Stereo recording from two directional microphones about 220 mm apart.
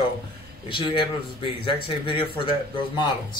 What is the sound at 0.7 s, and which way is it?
Speech, 25° left (ahead or behind).